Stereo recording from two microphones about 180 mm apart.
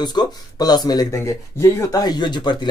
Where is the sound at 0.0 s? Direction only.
25° left (ahead or behind).